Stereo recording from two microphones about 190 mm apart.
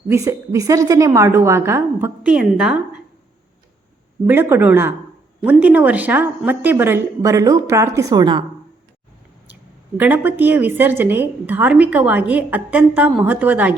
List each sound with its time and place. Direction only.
0.1 s a woman's voice: 15° right (ahead or behind)
4.3 s a woman's voice: 10° right (ahead or behind)
10.0 s a woman's voice: 10° right (ahead or behind)